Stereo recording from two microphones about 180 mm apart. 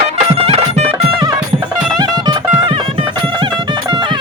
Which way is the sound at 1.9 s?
20° right (ahead or behind).